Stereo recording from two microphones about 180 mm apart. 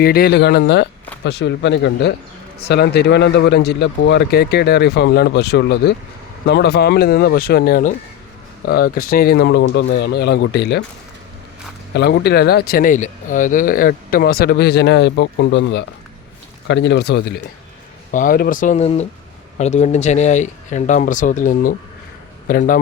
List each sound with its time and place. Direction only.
0.0 s speech: 60° left (ahead or behind)
11.9 s speech: 70° left (ahead or behind)
18.1 s speech: 50° left (ahead or behind)